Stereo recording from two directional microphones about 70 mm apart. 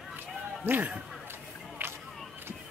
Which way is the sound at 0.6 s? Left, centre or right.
Right.